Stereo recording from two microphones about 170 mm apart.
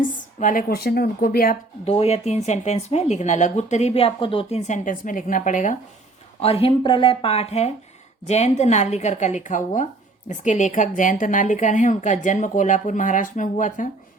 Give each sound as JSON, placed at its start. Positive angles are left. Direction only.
{"t": 0.1, "sound": "a sound", "side_deg": 50}
{"t": 0.7, "sound": "speech", "side_deg": 65}
{"t": 1.8, "sound": "speech", "side_deg": 35}
{"t": 6.4, "sound": "a woman's voice", "side_deg": 35}